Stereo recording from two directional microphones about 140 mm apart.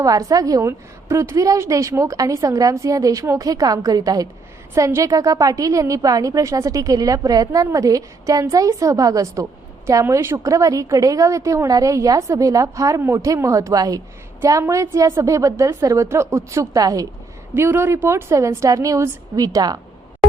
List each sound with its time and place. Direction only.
0.0 s a woman's voice: 25° right (ahead or behind)